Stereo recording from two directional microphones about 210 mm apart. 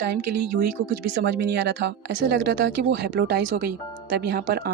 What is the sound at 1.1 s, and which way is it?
Speech, 55° right (ahead or behind).